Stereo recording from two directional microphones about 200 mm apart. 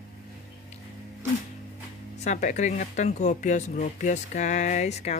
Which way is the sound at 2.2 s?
40° left (ahead or behind).